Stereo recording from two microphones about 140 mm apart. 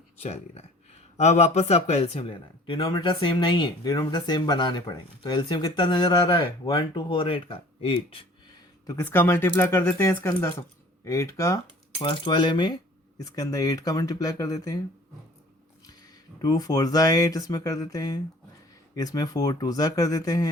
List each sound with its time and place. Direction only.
0.2 s speech: 50° left (ahead or behind)
8.9 s speech: 15° left (ahead or behind)
11.9 s speech: 35° left (ahead or behind)
16.4 s speech: 25° left (ahead or behind)